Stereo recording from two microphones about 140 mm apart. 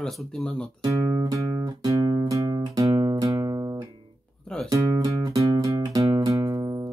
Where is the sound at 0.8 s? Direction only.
20° right (ahead or behind).